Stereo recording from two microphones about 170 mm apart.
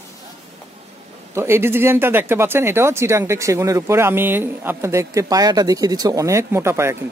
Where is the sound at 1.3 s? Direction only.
15° right (ahead or behind).